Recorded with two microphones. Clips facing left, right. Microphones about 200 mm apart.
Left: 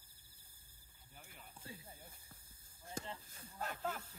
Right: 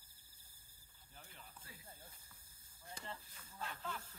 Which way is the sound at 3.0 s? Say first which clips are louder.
Left 6 dB; 45° left (ahead or behind).